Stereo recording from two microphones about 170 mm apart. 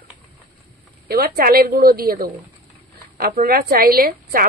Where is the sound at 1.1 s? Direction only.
60° right (ahead or behind).